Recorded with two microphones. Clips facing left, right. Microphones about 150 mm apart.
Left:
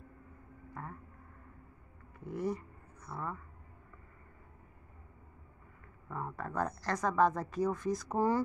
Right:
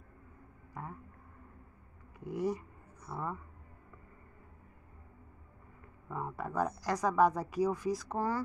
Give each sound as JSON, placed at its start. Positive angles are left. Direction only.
{"t": 0.8, "sound": "a sound", "side_deg": -15}
{"t": 2.3, "sound": "speech", "side_deg": -20}
{"t": 6.0, "sound": "speech", "side_deg": -10}
{"t": 8.1, "sound": "speech", "side_deg": 15}